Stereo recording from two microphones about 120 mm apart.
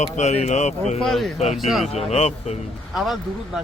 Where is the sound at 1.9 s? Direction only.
60° left (ahead or behind).